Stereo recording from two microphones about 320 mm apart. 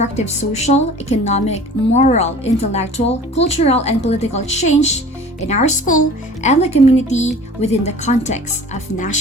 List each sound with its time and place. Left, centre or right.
1.0 s a woman's voice: left